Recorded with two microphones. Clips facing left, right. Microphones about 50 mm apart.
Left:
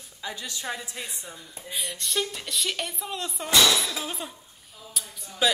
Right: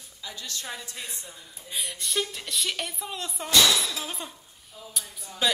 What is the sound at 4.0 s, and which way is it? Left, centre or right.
Speech, centre.